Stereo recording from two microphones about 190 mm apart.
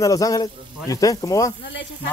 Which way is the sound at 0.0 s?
15° left (ahead or behind).